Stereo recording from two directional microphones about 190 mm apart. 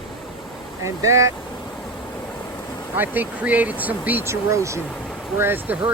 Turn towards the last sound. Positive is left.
turn(degrees=-10)  # may be behind; listen again after turning